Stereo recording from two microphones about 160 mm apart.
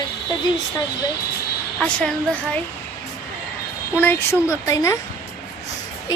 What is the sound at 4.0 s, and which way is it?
A woman's voice, 15° left (ahead or behind).